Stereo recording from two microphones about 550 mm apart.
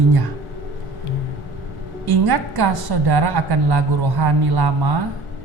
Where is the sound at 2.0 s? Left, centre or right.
Right.